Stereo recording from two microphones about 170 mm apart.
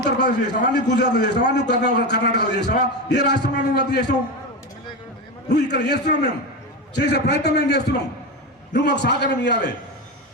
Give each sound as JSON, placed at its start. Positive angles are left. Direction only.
{"t": 0.0, "sound": "a man's voice", "side_deg": 85}
{"t": 5.5, "sound": "a man's voice", "side_deg": 80}
{"t": 8.7, "sound": "a man's voice", "side_deg": 90}